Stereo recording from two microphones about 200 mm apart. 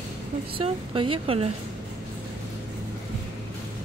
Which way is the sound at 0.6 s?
25° right (ahead or behind).